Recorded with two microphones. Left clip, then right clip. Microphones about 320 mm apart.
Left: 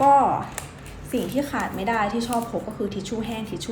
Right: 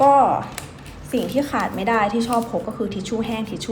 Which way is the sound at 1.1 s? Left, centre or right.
Centre.